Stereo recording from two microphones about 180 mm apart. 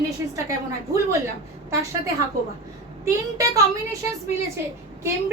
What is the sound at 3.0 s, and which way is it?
Speech, 20° right (ahead or behind).